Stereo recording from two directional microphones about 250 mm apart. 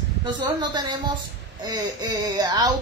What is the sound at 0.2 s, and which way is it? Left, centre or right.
Speech, centre.